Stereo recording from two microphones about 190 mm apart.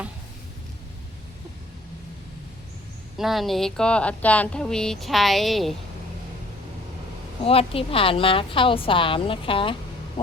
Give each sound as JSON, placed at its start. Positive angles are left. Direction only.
{"t": 3.2, "sound": "speech", "side_deg": 0}
{"t": 7.4, "sound": "a woman's voice", "side_deg": 30}